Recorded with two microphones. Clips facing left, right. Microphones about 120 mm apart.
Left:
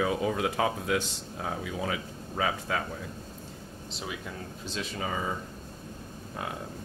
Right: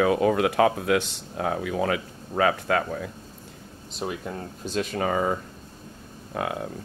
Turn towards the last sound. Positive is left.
turn(degrees=-75)  # may be behind; listen again after turning